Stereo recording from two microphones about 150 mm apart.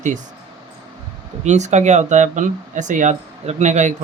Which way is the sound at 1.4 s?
50° right (ahead or behind).